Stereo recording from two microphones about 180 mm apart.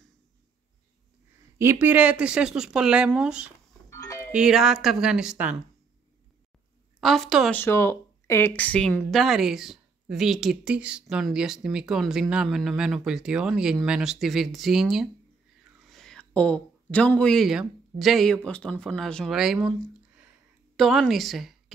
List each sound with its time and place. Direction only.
1.6 s speech: 10° right (ahead or behind)
3.9 s doorbell: 15° left (ahead or behind)
4.3 s speech: 5° right (ahead or behind)
7.0 s speech: centre (ahead or behind)
7.5 s speech: 15° left (ahead or behind)